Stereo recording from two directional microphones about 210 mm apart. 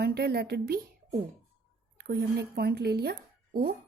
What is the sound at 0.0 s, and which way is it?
Speech, 50° right (ahead or behind).